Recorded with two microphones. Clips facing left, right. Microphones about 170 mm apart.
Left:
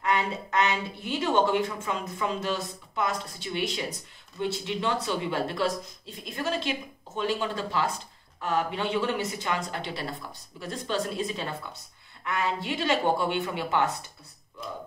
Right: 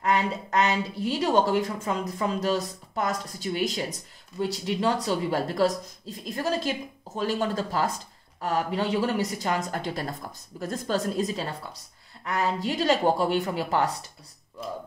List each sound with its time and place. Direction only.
0.0 s a woman's voice: 40° right (ahead or behind)